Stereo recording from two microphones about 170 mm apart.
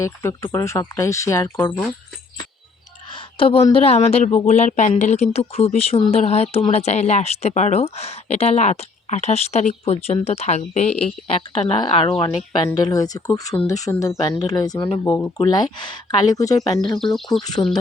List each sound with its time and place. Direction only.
0.0 s speech: 15° left (ahead or behind)
3.2 s a woman's voice: 30° left (ahead or behind); by 15.3 s 10° left (ahead or behind)
15.4 s speech: 25° left (ahead or behind)
17.0 s speech: centre (ahead or behind)
17.4 s speech: 25° left (ahead or behind)